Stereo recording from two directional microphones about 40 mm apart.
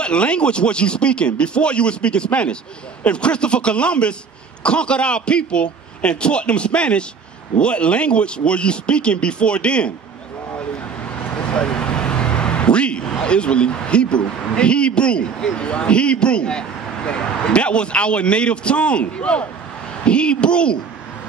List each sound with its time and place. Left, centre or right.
0.0 s speech: left
11.4 s speech: left